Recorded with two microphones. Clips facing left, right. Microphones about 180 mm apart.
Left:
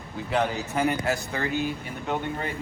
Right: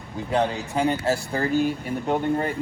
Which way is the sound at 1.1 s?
35° right (ahead or behind).